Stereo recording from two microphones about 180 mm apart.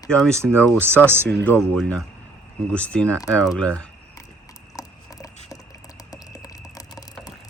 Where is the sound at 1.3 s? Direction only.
5° left (ahead or behind).